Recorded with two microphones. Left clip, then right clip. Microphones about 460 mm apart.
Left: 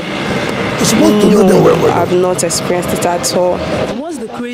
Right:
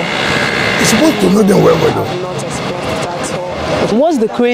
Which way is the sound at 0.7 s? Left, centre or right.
Centre.